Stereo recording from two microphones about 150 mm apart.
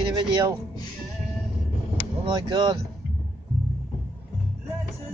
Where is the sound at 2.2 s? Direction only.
35° right (ahead or behind).